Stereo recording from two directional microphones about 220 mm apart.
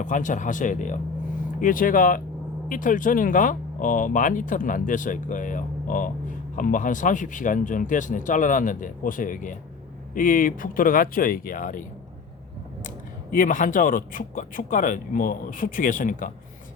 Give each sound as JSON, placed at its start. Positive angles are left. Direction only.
{"t": 0.0, "sound": "speech", "side_deg": 35}
{"t": 13.3, "sound": "speech", "side_deg": 35}